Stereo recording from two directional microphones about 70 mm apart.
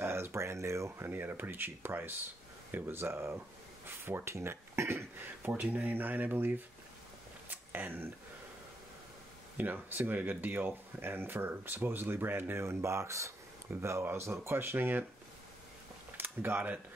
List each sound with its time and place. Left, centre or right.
0.0 s speech: right
5.4 s speech: right
7.4 s a sound: right
9.6 s speech: right
16.2 s speech: right